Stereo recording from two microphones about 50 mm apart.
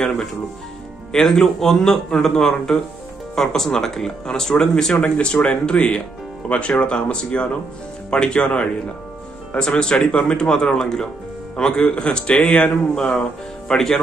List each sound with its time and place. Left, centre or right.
0.0 s speech: centre